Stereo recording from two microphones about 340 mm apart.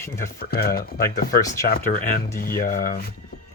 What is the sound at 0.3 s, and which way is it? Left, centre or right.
Speech, left.